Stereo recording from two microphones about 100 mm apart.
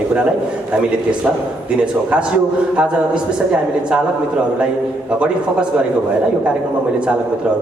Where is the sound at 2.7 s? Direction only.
10° right (ahead or behind).